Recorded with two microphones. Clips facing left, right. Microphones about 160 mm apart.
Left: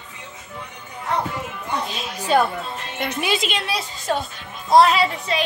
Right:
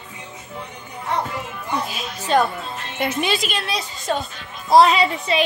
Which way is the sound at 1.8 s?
5° right (ahead or behind).